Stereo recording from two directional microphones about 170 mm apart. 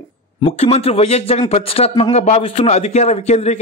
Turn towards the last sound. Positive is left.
turn(degrees=40)  # may be behind; listen again after turning